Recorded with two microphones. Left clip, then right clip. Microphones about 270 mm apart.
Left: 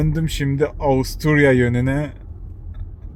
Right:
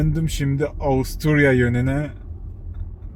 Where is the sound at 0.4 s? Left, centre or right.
Left.